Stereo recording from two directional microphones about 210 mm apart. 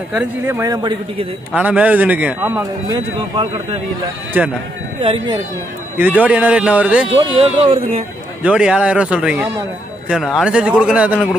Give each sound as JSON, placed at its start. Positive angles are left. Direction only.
{"t": 0.1, "sound": "speech", "side_deg": -10}
{"t": 1.5, "sound": "speech", "side_deg": -5}
{"t": 5.0, "sound": "speech", "side_deg": -25}
{"t": 6.0, "sound": "speech", "side_deg": -5}
{"t": 7.3, "sound": "speech", "side_deg": -25}
{"t": 8.4, "sound": "a man's voice", "side_deg": -5}